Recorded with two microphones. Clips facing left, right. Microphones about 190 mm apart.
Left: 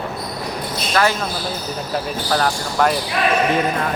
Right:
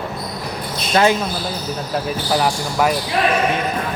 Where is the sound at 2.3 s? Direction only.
10° right (ahead or behind).